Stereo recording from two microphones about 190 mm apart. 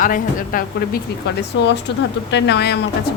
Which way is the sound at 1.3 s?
60° left (ahead or behind).